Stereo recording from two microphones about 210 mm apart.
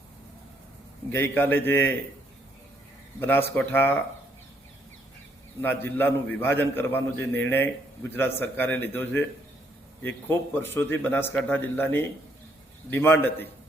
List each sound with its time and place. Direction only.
1.1 s a man's voice: 10° left (ahead or behind)
3.2 s a man's voice: 10° left (ahead or behind)
5.6 s a man's voice: 10° left (ahead or behind)